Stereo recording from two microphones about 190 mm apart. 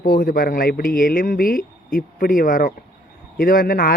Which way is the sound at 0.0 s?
50° left (ahead or behind).